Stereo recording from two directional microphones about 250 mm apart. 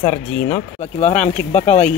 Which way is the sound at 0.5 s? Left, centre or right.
Left.